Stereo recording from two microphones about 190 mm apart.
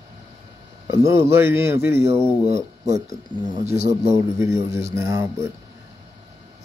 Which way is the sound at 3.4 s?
35° right (ahead or behind).